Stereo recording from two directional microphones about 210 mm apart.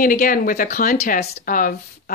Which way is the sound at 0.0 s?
40° left (ahead or behind).